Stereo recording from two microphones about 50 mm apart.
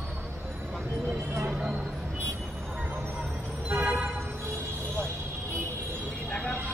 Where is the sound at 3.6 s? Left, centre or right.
Right.